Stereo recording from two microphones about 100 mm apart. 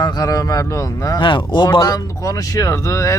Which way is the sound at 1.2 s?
50° left (ahead or behind).